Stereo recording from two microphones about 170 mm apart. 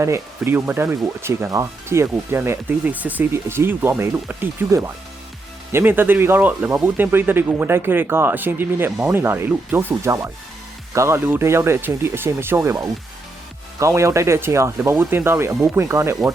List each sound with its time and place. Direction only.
0.0 s speech: 15° right (ahead or behind)